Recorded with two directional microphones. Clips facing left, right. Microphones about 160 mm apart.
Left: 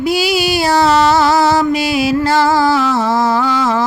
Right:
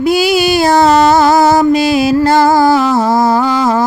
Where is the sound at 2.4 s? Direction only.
45° right (ahead or behind).